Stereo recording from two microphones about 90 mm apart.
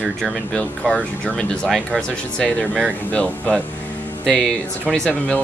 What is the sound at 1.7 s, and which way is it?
Speech, centre (ahead or behind).